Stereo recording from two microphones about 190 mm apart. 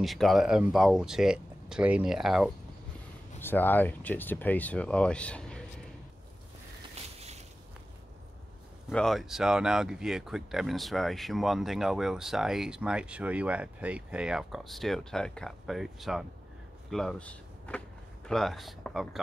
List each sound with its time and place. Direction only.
0.0 s speech: centre (ahead or behind)
3.3 s speech: 10° left (ahead or behind)
7.2 s a sound: 35° right (ahead or behind)
8.8 s speech: centre (ahead or behind)